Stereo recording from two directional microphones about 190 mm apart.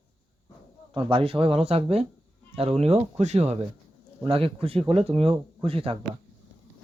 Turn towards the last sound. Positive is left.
turn(degrees=-30)  # may be behind; listen again after turning